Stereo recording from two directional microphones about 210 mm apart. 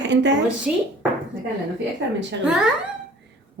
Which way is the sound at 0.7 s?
5° right (ahead or behind).